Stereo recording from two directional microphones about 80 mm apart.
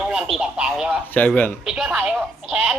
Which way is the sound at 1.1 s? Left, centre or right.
Centre.